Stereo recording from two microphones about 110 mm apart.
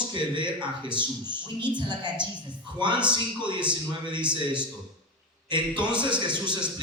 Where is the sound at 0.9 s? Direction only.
45° right (ahead or behind).